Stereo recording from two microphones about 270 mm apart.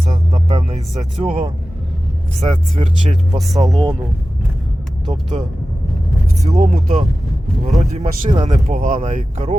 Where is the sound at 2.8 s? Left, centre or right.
Right.